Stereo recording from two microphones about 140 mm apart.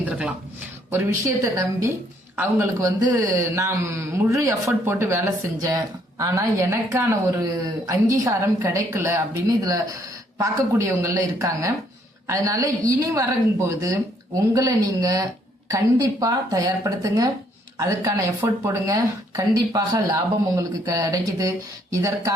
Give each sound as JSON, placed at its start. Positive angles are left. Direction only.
{"t": 0.0, "sound": "speech", "side_deg": -5}
{"t": 2.3, "sound": "a man's voice", "side_deg": -15}